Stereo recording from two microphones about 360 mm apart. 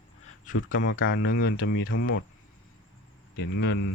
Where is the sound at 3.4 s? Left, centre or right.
Left.